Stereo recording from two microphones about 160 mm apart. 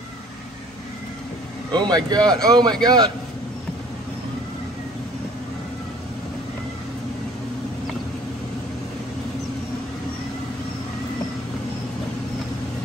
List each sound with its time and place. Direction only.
1.7 s speech: 25° right (ahead or behind)